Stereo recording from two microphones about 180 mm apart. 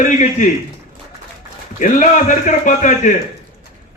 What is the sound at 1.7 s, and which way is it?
A man's voice, 45° left (ahead or behind).